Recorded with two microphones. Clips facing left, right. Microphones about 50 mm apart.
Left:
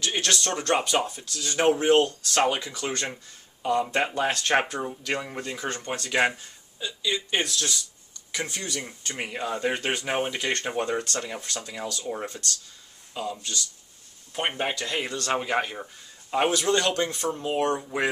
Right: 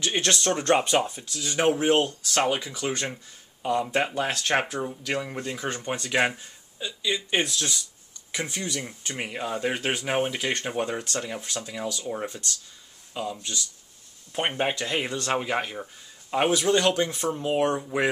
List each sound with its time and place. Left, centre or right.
0.0 s speech: right; by 12.3 s centre
12.3 s speech: centre
13.4 s speech: centre
15.3 s speech: centre